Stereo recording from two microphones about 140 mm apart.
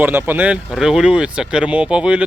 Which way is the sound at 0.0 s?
15° right (ahead or behind).